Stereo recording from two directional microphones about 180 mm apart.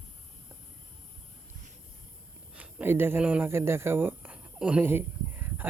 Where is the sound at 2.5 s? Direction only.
10° right (ahead or behind).